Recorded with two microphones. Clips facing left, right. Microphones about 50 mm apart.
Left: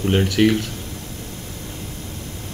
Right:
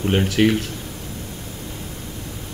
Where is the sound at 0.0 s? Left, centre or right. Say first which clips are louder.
Left 1 dB; centre.